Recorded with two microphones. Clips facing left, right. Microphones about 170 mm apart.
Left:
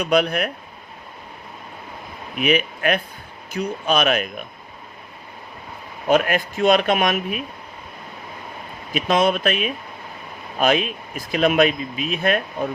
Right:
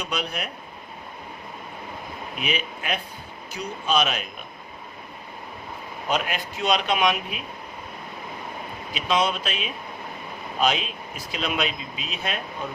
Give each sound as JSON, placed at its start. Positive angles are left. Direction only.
{"t": 0.0, "sound": "speech", "side_deg": 60}
{"t": 2.4, "sound": "speech", "side_deg": 60}
{"t": 6.1, "sound": "speech", "side_deg": 55}
{"t": 8.9, "sound": "speech", "side_deg": 50}